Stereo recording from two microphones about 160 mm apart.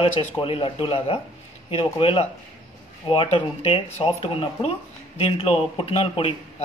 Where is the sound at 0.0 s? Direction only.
35° left (ahead or behind).